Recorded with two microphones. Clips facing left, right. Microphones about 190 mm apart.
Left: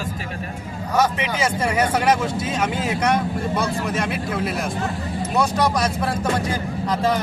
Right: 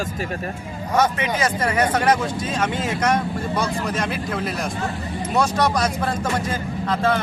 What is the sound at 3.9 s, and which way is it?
Speech, 5° left (ahead or behind).